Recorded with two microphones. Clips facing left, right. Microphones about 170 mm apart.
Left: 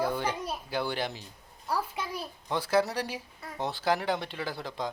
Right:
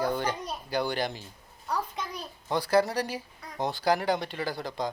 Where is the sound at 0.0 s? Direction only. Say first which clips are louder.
Right 1 dB; 5° left (ahead or behind).